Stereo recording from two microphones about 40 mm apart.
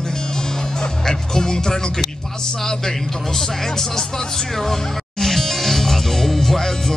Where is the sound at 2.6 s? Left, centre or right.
Centre.